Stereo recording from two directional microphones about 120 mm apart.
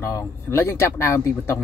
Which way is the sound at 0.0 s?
20° left (ahead or behind).